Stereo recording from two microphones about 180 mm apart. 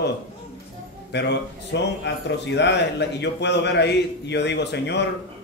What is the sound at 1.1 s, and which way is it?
A man's voice, 70° left (ahead or behind).